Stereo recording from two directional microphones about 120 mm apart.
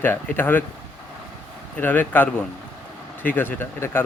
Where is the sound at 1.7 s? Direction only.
15° left (ahead or behind).